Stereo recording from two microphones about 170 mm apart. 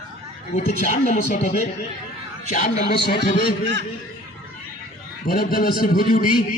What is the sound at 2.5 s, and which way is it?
Speech, 40° left (ahead or behind).